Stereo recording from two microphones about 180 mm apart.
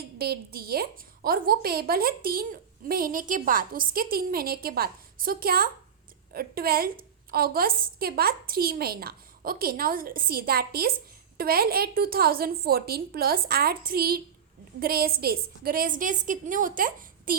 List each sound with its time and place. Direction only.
0.2 s a woman's voice: 60° right (ahead or behind)